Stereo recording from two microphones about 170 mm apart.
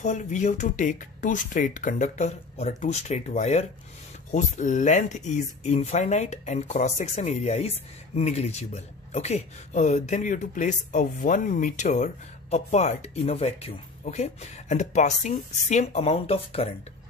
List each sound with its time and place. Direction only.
0.0 s speech: 45° left (ahead or behind)